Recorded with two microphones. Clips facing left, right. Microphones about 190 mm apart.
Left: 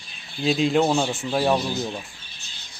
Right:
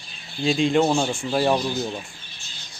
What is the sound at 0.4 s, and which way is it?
Speech, 5° left (ahead or behind).